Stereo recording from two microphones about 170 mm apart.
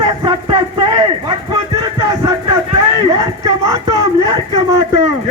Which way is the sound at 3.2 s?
20° right (ahead or behind).